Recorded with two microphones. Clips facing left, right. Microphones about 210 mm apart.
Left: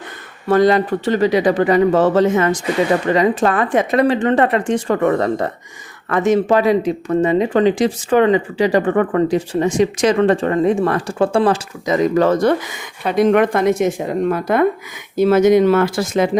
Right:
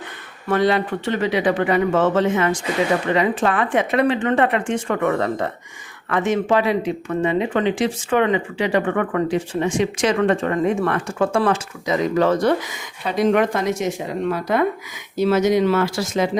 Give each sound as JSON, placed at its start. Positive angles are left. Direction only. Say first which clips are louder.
{"t": 0.4, "sound": "speech", "louder": "left 5 dB", "side_deg": 40}
{"t": 11.9, "sound": "speech", "louder": "left 4 dB", "side_deg": 45}